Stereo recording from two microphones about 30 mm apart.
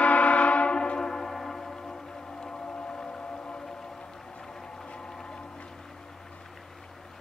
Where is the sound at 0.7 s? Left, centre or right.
Left.